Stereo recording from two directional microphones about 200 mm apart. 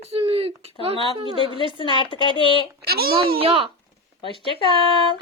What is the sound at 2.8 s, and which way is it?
Speech, 50° right (ahead or behind).